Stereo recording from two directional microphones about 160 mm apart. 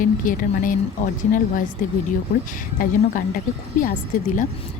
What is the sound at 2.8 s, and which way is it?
Speech, 65° left (ahead or behind).